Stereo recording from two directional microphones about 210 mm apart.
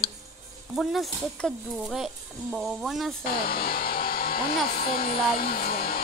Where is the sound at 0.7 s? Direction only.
Centre (ahead or behind).